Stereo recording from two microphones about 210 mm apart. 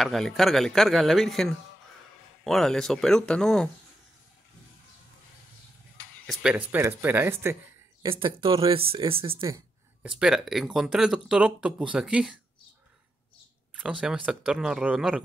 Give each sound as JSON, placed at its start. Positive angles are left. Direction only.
{"t": 0.0, "sound": "speech", "side_deg": 0}
{"t": 6.2, "sound": "speech", "side_deg": 0}
{"t": 8.0, "sound": "speech", "side_deg": -25}
{"t": 10.0, "sound": "speech", "side_deg": -5}
{"t": 13.7, "sound": "speech", "side_deg": -5}